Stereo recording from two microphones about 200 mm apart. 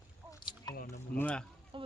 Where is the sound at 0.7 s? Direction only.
45° left (ahead or behind).